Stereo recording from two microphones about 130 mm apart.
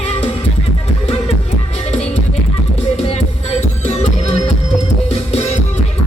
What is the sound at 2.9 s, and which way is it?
Music, 55° left (ahead or behind).